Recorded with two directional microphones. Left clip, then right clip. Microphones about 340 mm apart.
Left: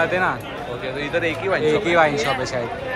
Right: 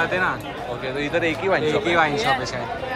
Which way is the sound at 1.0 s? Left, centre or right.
Right.